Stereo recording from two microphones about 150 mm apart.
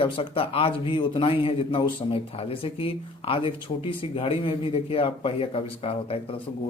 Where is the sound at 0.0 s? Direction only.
35° left (ahead or behind).